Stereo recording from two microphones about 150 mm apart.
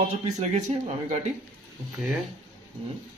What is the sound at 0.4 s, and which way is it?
Speech, 50° right (ahead or behind).